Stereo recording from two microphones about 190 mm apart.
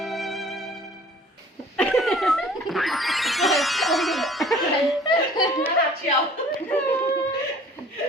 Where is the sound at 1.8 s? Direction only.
Centre (ahead or behind).